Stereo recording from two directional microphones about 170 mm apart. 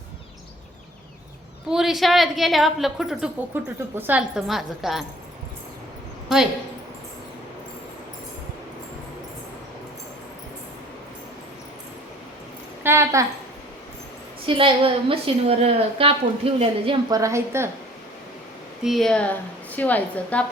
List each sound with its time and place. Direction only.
1.6 s a woman's voice: centre (ahead or behind)
4.4 s a woman's voice: centre (ahead or behind)
6.2 s a woman's voice: 5° right (ahead or behind)
12.8 s a sound: 15° right (ahead or behind)
14.4 s a woman's voice: 30° right (ahead or behind)
17.2 s speech: 15° right (ahead or behind)
18.8 s a woman's voice: centre (ahead or behind)